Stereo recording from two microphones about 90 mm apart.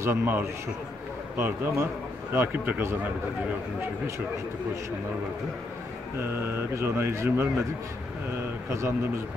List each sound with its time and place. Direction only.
0.0 s speech: 25° right (ahead or behind)
6.1 s speech: 25° right (ahead or behind)
8.6 s speech: 35° right (ahead or behind)